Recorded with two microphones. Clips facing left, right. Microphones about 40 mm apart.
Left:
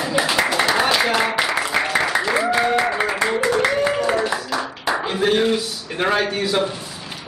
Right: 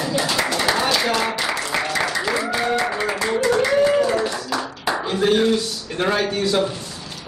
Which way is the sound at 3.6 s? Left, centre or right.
Centre.